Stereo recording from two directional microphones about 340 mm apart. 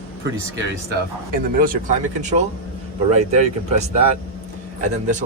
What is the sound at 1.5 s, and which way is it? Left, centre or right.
Speech, right.